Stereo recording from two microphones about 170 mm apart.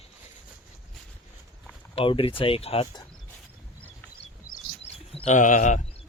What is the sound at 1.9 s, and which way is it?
Speech, 30° left (ahead or behind).